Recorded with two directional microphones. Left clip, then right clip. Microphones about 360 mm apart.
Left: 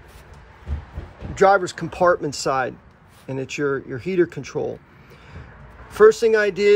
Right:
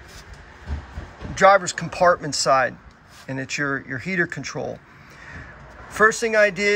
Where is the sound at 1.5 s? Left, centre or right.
Left.